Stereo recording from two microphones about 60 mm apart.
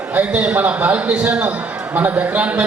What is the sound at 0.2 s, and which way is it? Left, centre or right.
A man's voice, right.